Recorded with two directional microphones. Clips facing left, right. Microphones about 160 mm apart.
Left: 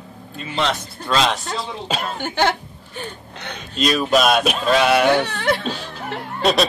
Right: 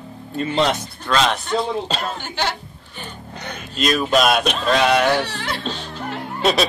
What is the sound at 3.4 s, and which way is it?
A woman's voice, 5° right (ahead or behind).